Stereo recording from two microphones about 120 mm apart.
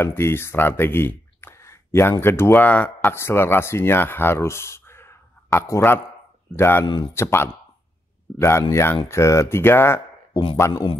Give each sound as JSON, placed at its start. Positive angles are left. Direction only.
{"t": 0.0, "sound": "speech", "side_deg": 20}
{"t": 10.7, "sound": "speech", "side_deg": 40}